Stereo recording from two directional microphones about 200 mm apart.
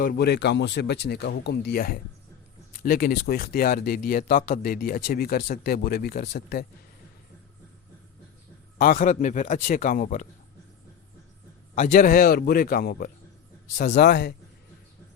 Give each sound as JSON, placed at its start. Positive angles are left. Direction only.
{"t": 0.0, "sound": "speech", "side_deg": 50}
{"t": 8.8, "sound": "speech", "side_deg": 40}
{"t": 11.7, "sound": "speech", "side_deg": 40}
{"t": 13.9, "sound": "speech", "side_deg": 55}